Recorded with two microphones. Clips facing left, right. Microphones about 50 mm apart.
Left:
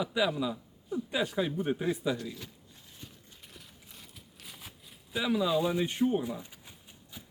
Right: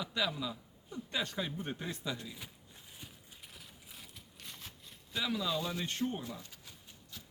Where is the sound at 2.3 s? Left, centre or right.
Centre.